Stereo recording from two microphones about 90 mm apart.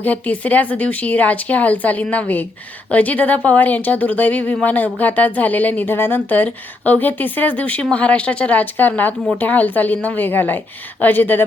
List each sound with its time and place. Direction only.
0.0 s a woman's voice: 15° left (ahead or behind)